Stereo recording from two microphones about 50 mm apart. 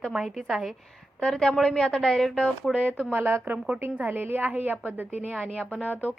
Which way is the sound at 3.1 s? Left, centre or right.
Right.